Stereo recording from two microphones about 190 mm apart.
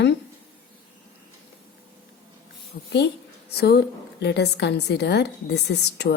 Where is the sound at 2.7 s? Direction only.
50° left (ahead or behind).